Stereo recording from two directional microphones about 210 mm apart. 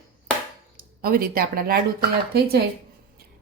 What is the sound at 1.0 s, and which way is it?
Speech, 45° right (ahead or behind).